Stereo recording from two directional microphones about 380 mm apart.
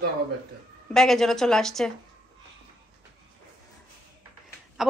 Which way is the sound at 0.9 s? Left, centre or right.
Centre.